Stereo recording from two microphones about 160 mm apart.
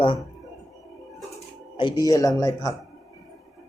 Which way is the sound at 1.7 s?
25° left (ahead or behind).